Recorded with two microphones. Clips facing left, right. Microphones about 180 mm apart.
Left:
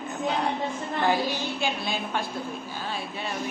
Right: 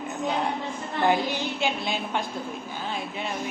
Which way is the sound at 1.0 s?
20° right (ahead or behind).